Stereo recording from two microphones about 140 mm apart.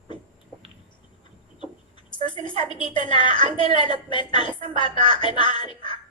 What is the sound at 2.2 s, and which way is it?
A woman's voice, 35° left (ahead or behind).